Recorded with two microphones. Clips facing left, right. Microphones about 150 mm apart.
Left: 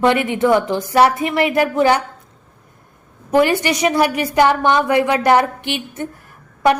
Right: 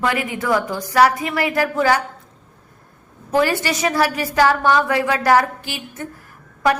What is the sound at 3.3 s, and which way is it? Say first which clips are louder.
A woman's voice: left 4 dB; 20° left (ahead or behind).